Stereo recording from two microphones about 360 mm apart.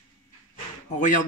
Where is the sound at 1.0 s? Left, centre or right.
Left.